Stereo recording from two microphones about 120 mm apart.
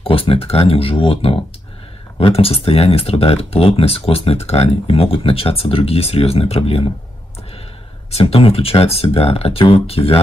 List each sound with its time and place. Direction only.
0.0 s speech: 50° left (ahead or behind)
8.1 s speech: 55° left (ahead or behind)